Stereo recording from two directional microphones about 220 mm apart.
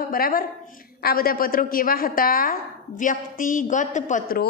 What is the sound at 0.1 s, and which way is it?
A woman's voice, 40° left (ahead or behind).